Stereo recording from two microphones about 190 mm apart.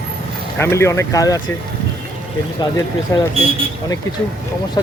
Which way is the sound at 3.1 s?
15° left (ahead or behind).